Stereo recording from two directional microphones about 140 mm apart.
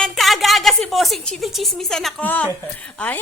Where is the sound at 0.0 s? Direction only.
Centre (ahead or behind).